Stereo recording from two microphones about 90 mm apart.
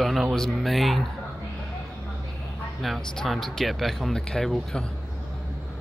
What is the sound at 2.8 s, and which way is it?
Speech, centre (ahead or behind).